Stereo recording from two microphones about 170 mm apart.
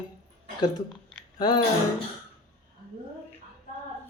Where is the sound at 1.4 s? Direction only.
25° left (ahead or behind).